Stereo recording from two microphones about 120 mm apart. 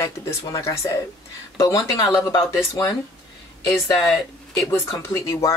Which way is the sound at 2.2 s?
30° left (ahead or behind).